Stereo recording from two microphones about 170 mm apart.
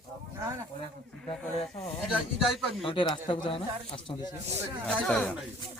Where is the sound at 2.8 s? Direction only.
30° left (ahead or behind).